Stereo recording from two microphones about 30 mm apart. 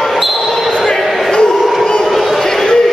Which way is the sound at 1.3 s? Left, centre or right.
Left.